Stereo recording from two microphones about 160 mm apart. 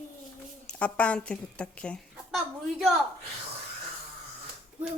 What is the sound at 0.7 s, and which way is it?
A woman's voice, 10° left (ahead or behind).